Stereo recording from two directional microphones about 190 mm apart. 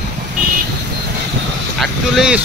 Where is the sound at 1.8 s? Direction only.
Centre (ahead or behind).